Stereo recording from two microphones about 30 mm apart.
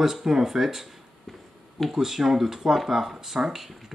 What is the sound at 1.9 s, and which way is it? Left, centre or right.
Speech, centre.